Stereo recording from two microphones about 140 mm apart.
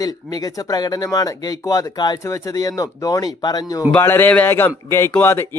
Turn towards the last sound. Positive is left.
turn(degrees=15)  # may be behind; listen again after turning